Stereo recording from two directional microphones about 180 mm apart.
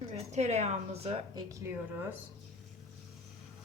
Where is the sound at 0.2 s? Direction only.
40° right (ahead or behind).